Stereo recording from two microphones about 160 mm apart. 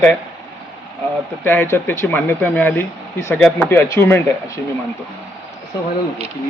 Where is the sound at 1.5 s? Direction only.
15° left (ahead or behind).